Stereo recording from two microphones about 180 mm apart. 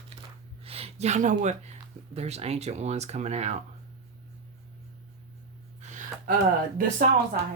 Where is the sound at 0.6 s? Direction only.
35° right (ahead or behind).